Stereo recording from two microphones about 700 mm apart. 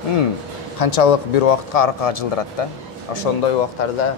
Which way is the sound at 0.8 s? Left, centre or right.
Left.